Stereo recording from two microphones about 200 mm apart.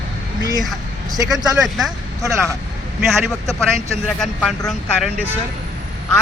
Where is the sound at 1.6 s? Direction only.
Centre (ahead or behind).